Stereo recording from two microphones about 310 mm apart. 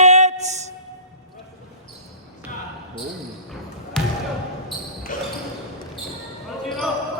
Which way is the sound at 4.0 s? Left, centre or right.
Centre.